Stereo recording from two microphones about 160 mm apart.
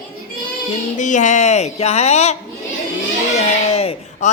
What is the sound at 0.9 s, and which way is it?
A man's voice, 50° left (ahead or behind).